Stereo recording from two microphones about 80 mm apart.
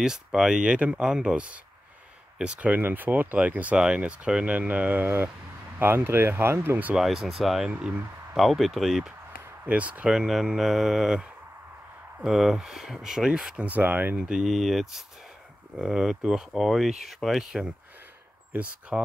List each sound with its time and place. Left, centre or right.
0.0 s speech: centre; by 7.0 s right
7.0 s speech: centre
7.7 s speech: centre
8.4 s speech: centre
9.7 s speech: centre
10.1 s speech: centre
13.7 s speech: right
14.5 s speech: centre